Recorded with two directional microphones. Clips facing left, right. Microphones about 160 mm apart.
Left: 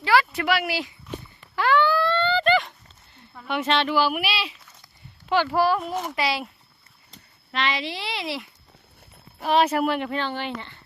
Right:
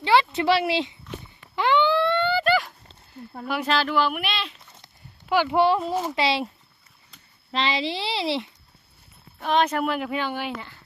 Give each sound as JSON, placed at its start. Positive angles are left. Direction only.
{"t": 0.0, "sound": "speech", "side_deg": -25}
{"t": 1.5, "sound": "a sound", "side_deg": -20}
{"t": 3.4, "sound": "speech", "side_deg": 0}
{"t": 5.3, "sound": "a child's voice", "side_deg": -15}
{"t": 7.5, "sound": "a child's voice", "side_deg": -25}
{"t": 9.4, "sound": "speech", "side_deg": 5}